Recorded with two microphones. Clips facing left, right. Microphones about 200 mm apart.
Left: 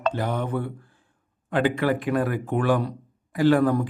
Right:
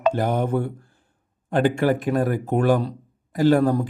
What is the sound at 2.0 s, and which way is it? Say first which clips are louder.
A man's voice: right 2 dB; 45° right (ahead or behind).